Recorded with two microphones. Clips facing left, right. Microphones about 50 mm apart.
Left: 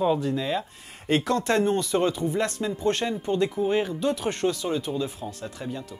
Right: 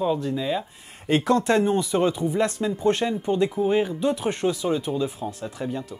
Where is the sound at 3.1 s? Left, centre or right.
Centre.